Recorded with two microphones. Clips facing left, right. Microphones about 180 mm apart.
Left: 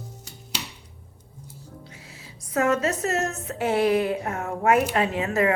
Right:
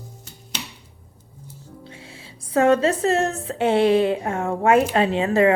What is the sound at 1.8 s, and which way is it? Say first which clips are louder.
A woman's voice: right 4 dB; 30° right (ahead or behind).